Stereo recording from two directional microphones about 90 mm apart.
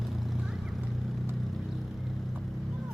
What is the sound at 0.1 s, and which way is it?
Vehicle, centre (ahead or behind).